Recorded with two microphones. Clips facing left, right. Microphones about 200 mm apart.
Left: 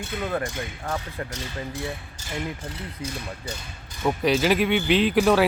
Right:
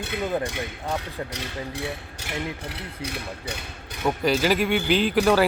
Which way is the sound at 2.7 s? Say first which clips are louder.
Even; 70° right (ahead or behind).